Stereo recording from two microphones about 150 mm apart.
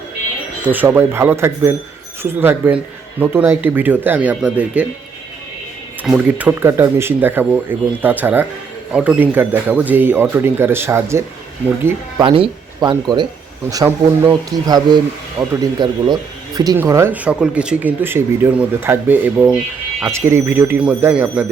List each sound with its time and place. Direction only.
0.6 s speech: 10° right (ahead or behind)
6.0 s speech: 10° right (ahead or behind)
12.1 s speech: 30° right (ahead or behind); by 20.1 s 5° right (ahead or behind)
20.1 s speech: 15° right (ahead or behind)